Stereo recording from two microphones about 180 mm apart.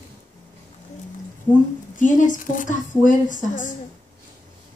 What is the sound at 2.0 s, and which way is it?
A woman's voice, 45° left (ahead or behind).